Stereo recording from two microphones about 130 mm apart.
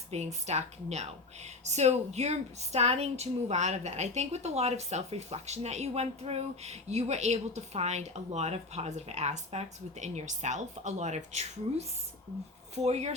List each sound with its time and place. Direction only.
0.1 s a woman's voice: 60° right (ahead or behind)